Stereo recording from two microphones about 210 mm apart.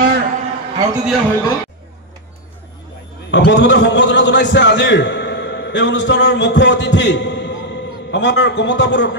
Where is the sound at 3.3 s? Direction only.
60° left (ahead or behind).